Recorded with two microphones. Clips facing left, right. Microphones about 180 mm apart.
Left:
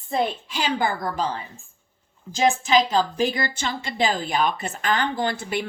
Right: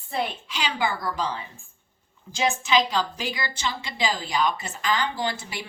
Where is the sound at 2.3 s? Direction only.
45° left (ahead or behind).